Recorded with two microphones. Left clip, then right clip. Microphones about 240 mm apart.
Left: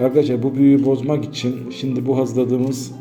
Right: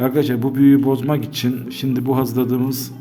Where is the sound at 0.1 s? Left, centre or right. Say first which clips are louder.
Left 2 dB; right.